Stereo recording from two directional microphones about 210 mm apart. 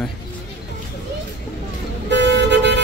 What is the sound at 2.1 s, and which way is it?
Vehicle, 55° right (ahead or behind).